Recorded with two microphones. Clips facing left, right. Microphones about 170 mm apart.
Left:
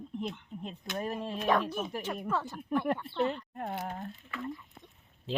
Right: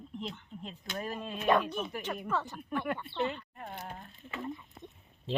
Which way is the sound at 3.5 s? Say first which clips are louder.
Left 6 dB; 55° left (ahead or behind).